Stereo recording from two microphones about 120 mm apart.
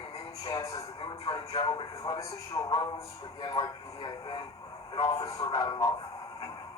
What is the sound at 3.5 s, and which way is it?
Speech, 40° left (ahead or behind).